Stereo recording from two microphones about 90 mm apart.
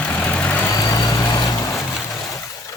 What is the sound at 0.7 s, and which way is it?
Vehicle, 40° left (ahead or behind).